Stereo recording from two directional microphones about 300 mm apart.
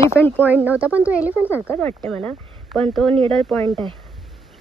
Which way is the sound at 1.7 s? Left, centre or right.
Centre.